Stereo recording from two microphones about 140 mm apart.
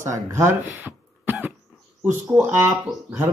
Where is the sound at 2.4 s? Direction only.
15° right (ahead or behind).